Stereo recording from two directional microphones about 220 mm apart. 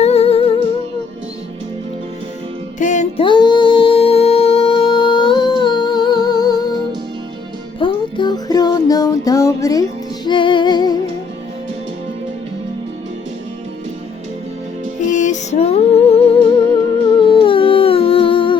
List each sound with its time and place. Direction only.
0.0 s music: 30° left (ahead or behind)
2.7 s music: 35° left (ahead or behind); by 6.6 s 20° left (ahead or behind)
7.8 s music: 20° left (ahead or behind)
15.1 s female singing: 35° left (ahead or behind)
17.2 s humming: 20° left (ahead or behind)